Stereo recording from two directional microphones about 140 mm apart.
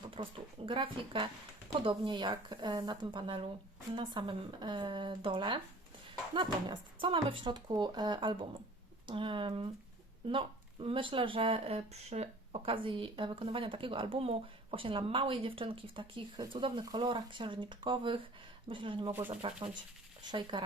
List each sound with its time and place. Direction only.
0.1 s speech: 40° right (ahead or behind)